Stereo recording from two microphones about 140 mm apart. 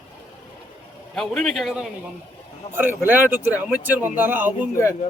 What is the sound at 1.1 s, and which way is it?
Speech, 5° left (ahead or behind).